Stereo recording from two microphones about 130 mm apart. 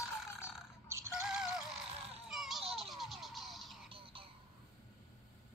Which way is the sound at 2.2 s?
Centre (ahead or behind).